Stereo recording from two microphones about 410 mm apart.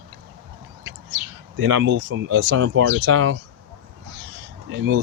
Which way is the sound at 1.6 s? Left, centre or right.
Right.